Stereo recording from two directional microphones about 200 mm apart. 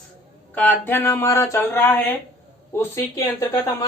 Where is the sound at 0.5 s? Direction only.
10° left (ahead or behind).